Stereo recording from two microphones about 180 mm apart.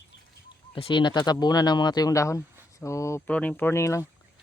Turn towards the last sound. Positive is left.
turn(degrees=15)  # may be behind; listen again after turning